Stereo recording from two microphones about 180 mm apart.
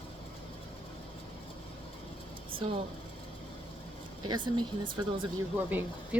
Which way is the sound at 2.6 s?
30° right (ahead or behind).